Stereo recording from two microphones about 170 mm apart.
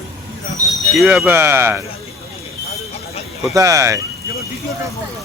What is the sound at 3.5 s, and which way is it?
Speech, 20° right (ahead or behind).